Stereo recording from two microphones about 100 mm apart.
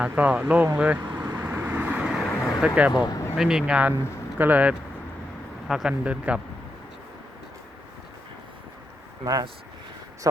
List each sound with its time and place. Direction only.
0.0 s speech: 15° right (ahead or behind)
1.2 s vehicle: 30° right (ahead or behind); by 2.9 s 10° right (ahead or behind)
2.9 s speech: 45° left (ahead or behind)
3.3 s speech: 5° right (ahead or behind)
5.6 s speech: 5° right (ahead or behind)
9.2 s speech: 40° right (ahead or behind)